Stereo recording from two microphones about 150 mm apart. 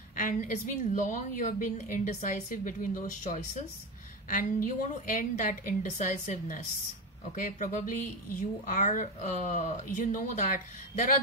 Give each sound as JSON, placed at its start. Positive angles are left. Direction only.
{"t": 0.1, "sound": "a woman's voice", "side_deg": 60}